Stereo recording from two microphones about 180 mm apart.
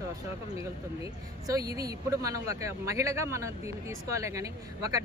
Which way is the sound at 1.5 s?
20° right (ahead or behind).